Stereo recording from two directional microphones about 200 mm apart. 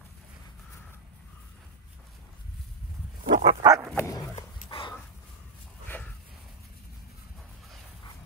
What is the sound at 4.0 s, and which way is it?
Dog, 15° left (ahead or behind).